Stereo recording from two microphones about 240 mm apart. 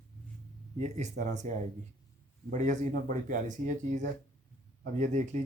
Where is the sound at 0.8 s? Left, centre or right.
Right.